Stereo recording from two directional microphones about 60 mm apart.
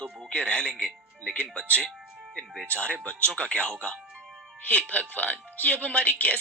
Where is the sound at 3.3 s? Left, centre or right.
Left.